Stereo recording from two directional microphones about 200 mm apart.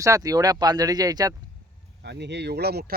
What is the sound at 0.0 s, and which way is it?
Speech, 15° right (ahead or behind).